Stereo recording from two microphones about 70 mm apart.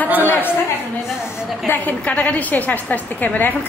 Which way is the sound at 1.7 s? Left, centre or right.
Left.